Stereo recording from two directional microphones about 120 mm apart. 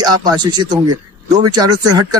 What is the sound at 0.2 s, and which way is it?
Speech, 35° right (ahead or behind).